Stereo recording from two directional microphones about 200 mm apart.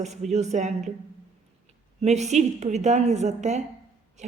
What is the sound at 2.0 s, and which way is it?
A woman's voice, 35° right (ahead or behind).